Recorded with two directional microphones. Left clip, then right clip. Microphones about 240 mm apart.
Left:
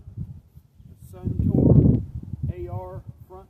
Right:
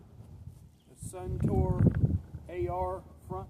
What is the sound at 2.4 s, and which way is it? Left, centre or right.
Speech, centre.